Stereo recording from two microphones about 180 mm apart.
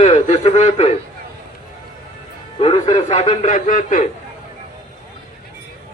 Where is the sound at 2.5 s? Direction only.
30° left (ahead or behind); by 4.1 s 45° left (ahead or behind).